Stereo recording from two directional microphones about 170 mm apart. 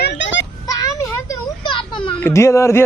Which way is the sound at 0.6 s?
20° left (ahead or behind).